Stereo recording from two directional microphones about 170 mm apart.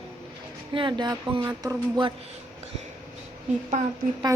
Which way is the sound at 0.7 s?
25° right (ahead or behind).